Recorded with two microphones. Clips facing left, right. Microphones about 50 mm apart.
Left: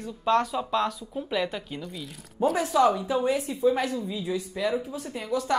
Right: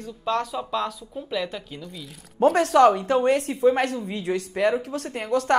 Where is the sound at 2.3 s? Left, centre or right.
Right.